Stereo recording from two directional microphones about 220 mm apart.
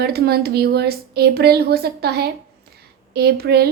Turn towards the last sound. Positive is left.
turn(degrees=-45)  # may be behind; listen again after turning